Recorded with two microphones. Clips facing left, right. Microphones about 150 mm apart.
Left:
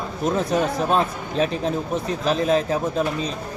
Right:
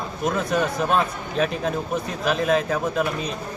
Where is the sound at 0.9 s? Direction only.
35° left (ahead or behind).